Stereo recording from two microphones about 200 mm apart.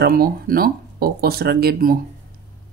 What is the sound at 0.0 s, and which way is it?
Speech, 50° right (ahead or behind).